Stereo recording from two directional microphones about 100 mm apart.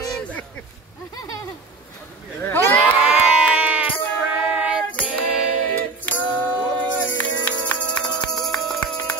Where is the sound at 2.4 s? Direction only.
20° left (ahead or behind).